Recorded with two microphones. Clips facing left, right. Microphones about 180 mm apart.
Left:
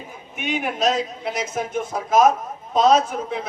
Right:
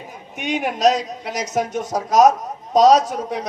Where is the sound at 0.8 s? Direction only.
40° right (ahead or behind).